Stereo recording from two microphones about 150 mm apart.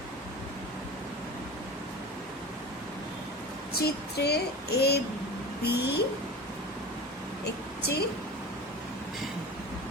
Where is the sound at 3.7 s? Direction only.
90° left.